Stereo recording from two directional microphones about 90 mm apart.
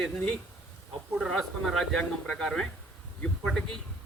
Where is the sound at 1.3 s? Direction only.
5° left (ahead or behind).